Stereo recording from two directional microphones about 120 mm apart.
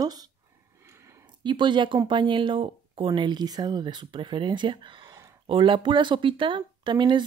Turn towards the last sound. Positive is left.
turn(degrees=-40)  # may be behind; listen again after turning